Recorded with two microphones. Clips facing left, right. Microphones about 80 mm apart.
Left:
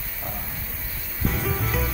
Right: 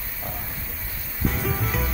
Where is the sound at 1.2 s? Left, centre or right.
Centre.